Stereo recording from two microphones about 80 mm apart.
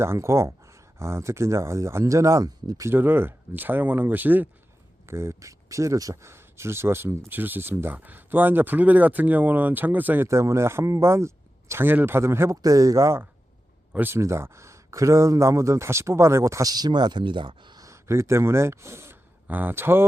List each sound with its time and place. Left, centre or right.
0.0 s speech: right
2.8 s speech: right
5.0 s speech: right
6.3 s speech: right
10.2 s speech: right
12.6 s speech: right
13.9 s speech: right
14.2 s speech: right
16.7 s speech: right
17.7 s speech: right